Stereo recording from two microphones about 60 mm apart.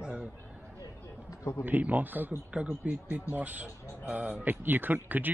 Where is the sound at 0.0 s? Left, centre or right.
Centre.